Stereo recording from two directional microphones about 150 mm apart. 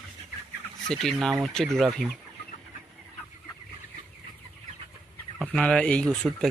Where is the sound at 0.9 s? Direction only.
5° left (ahead or behind).